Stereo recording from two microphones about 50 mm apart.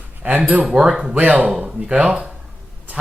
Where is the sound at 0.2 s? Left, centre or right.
Right.